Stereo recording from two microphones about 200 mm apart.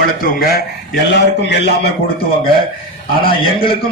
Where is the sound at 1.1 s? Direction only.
60° left (ahead or behind).